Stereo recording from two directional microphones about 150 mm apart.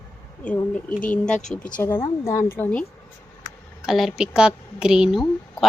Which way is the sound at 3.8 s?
Centre (ahead or behind).